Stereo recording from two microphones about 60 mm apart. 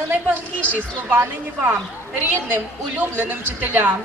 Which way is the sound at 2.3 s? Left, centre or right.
Right.